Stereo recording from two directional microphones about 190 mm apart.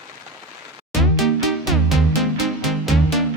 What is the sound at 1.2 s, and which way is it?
Music, centre (ahead or behind).